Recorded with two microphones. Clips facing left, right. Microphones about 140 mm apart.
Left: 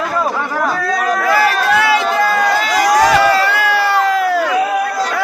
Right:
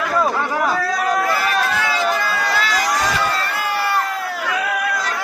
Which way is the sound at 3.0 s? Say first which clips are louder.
Left 9 dB; 75° left (ahead or behind).